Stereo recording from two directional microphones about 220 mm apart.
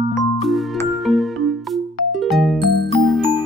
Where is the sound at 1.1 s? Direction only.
Centre (ahead or behind).